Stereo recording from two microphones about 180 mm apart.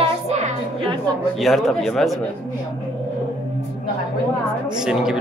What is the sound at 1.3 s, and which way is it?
Speech, centre (ahead or behind).